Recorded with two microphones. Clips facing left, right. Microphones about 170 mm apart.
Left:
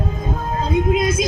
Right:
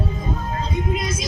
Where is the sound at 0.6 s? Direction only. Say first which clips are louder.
Left 10 dB; 55° left (ahead or behind).